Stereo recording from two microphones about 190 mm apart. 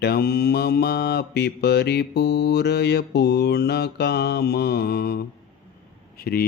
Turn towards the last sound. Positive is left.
turn(degrees=55)  # may be behind; listen again after turning